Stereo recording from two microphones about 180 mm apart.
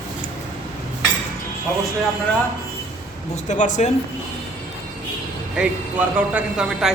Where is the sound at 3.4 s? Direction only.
45° left (ahead or behind).